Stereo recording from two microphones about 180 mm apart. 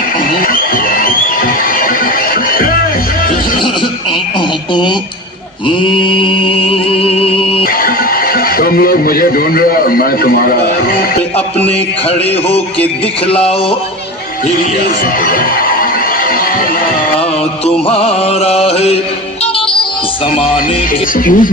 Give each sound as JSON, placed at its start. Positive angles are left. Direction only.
{"t": 0.4, "sound": "music", "side_deg": 50}
{"t": 5.6, "sound": "music", "side_deg": 30}
{"t": 7.6, "sound": "music", "side_deg": 55}
{"t": 8.5, "sound": "a man's voice", "side_deg": 55}
{"t": 12.0, "sound": "music", "side_deg": 35}
{"t": 15.2, "sound": "music", "side_deg": 50}
{"t": 17.8, "sound": "music", "side_deg": 35}
{"t": 21.2, "sound": "speech", "side_deg": 50}